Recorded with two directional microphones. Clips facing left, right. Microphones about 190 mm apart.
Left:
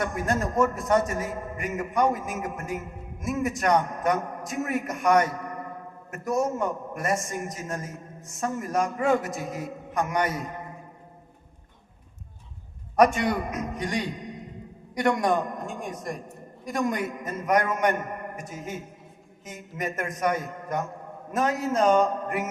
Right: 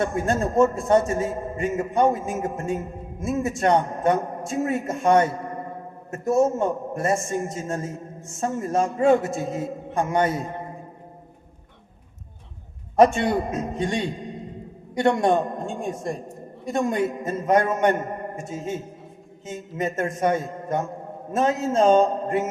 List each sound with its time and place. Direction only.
0.0 s a man's voice: 25° right (ahead or behind)
13.0 s a man's voice: 25° right (ahead or behind)